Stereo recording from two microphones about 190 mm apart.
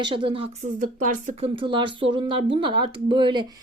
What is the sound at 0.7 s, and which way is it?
Speech, 45° right (ahead or behind).